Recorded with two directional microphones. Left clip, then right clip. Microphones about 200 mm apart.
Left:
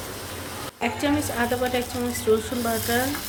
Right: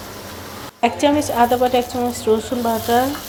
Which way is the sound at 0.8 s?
25° right (ahead or behind).